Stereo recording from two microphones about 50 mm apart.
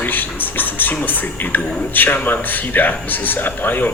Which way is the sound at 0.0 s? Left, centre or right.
Left.